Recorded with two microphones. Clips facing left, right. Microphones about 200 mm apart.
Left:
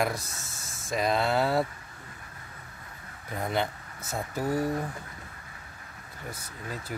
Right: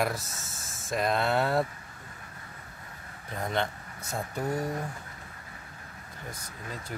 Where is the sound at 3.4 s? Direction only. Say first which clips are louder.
Left 1 dB; 5° left (ahead or behind).